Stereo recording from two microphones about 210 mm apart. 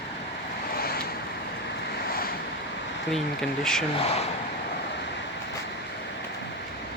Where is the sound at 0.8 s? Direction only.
45° left (ahead or behind).